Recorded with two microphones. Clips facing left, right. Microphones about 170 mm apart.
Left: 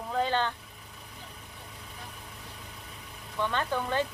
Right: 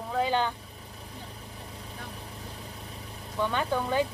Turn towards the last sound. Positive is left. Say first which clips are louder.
# right 2 dB
turn(degrees=-10)  # may be behind; listen again after turning